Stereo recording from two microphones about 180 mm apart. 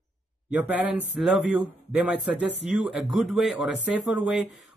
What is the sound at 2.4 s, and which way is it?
Speech, 75° left (ahead or behind).